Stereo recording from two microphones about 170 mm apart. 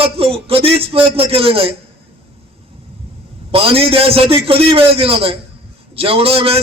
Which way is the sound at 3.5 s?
35° right (ahead or behind).